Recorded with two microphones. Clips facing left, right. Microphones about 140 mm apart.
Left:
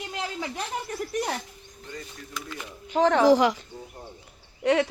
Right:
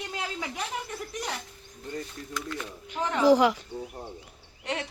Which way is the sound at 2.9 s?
80° left.